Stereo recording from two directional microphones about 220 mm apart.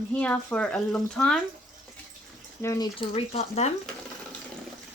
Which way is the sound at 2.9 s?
25° left (ahead or behind).